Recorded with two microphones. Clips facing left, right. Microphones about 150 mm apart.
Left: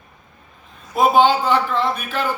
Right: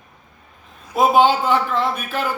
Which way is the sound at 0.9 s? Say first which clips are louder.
Even; 10° right (ahead or behind).